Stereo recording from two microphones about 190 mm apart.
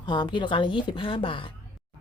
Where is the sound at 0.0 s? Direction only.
25° left (ahead or behind).